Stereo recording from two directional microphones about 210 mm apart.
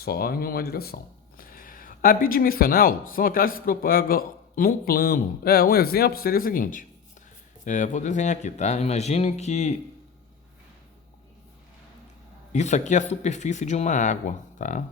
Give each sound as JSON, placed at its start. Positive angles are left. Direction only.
{"t": 0.0, "sound": "speech", "side_deg": 45}
{"t": 12.5, "sound": "speech", "side_deg": 35}